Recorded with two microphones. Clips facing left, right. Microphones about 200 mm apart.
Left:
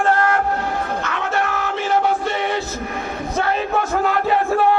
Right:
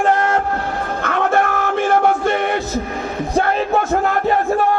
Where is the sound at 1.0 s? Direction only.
50° right (ahead or behind).